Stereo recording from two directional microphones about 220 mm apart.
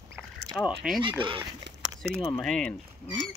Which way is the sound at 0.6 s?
5° right (ahead or behind).